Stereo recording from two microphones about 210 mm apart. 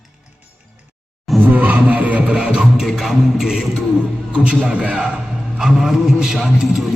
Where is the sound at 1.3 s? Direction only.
5° right (ahead or behind).